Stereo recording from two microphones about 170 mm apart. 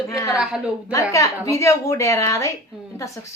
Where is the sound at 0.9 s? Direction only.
20° left (ahead or behind).